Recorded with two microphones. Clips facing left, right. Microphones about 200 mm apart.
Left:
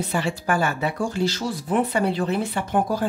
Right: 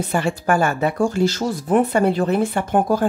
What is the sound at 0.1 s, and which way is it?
Speech, 50° right (ahead or behind).